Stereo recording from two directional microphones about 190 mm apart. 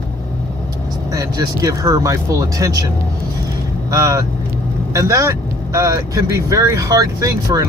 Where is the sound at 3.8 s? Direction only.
20° right (ahead or behind).